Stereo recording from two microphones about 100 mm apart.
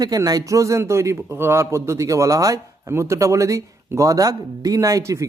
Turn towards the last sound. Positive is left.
turn(degrees=-30)  # may be behind; listen again after turning